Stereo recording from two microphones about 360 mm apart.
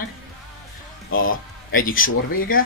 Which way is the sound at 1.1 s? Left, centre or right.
Left.